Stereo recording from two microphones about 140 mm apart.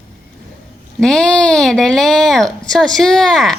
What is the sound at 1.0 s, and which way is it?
A woman's voice, 5° left (ahead or behind).